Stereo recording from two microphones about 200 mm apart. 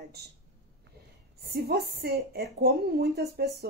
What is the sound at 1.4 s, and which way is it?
A woman's voice, 50° right (ahead or behind).